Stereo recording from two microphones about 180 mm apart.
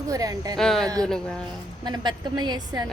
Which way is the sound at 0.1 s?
20° right (ahead or behind).